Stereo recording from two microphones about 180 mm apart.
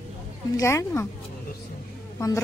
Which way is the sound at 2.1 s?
15° left (ahead or behind).